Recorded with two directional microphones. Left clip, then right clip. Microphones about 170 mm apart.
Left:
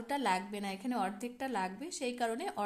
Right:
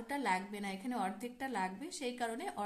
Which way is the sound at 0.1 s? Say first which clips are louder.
Left 3 dB; 35° left (ahead or behind).